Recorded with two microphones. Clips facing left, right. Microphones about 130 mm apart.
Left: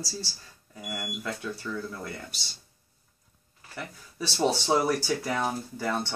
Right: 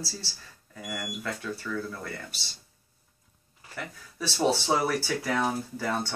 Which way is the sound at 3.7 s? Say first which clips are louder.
Even; 10° right (ahead or behind).